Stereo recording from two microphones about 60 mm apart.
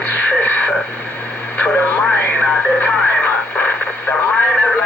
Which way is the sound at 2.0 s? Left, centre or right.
Left.